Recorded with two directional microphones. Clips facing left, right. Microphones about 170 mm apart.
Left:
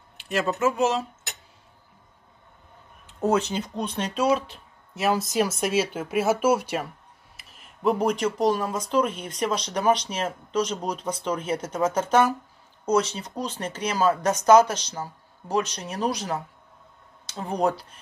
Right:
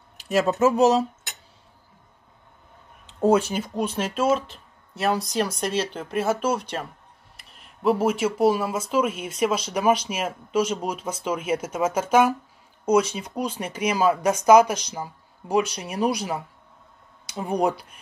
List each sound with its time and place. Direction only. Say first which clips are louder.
0.2 s speech: right 4 dB; 40° right (ahead or behind)
3.2 s speech: right 4 dB; 10° right (ahead or behind)